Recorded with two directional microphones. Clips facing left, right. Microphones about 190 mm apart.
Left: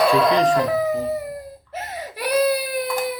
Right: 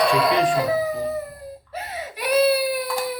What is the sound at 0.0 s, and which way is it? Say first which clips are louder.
Speech: left 2 dB; centre (ahead or behind).